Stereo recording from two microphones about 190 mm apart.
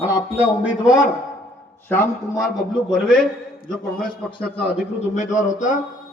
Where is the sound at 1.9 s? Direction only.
10° left (ahead or behind).